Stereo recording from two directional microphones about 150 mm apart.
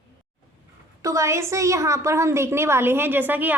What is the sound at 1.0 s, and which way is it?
A woman's voice, 20° right (ahead or behind).